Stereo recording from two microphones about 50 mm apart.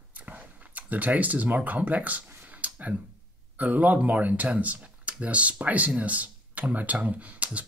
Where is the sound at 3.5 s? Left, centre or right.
Right.